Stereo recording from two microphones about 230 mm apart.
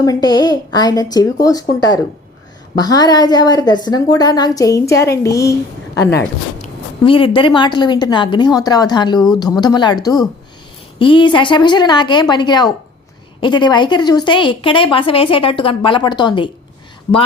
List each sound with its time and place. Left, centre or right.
0.0 s a woman's voice: centre
2.7 s a woman's voice: centre